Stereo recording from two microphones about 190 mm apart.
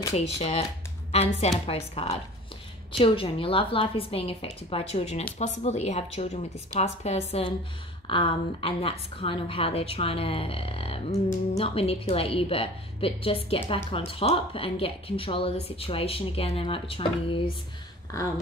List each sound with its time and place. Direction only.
0.1 s a woman's voice: 30° left (ahead or behind)